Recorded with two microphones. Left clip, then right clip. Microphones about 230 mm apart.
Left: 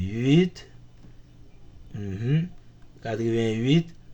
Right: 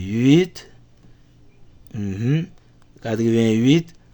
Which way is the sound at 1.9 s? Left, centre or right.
Right.